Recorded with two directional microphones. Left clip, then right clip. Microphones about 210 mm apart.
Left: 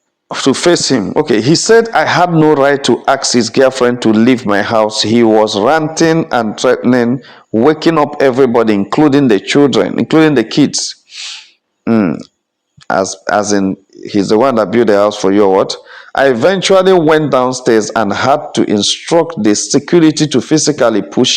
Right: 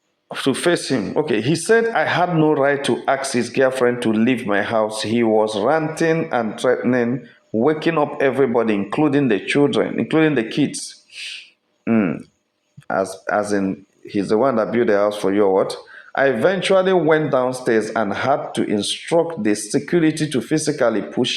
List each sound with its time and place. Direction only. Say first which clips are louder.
0.3 s speech: left 8 dB; 45° left (ahead or behind)